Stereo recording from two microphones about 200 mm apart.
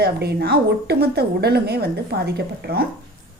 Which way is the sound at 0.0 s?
55° right (ahead or behind).